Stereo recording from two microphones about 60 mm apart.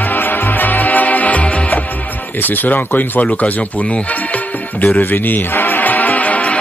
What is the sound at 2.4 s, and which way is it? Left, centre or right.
Speech, left.